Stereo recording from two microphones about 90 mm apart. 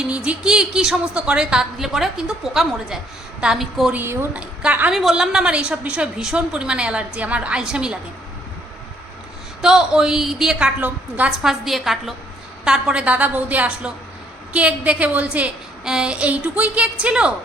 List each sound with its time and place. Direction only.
0.0 s a woman's voice: 10° right (ahead or behind)
3.9 s a woman's voice: 25° right (ahead or behind)
4.4 s a woman's voice: 15° right (ahead or behind)
4.9 s a woman's voice: 5° right (ahead or behind)
9.6 s a woman's voice: 5° right (ahead or behind)
11.4 s a woman's voice: 5° right (ahead or behind)